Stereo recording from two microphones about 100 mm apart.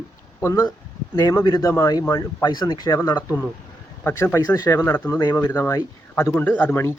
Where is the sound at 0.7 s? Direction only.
40° left (ahead or behind).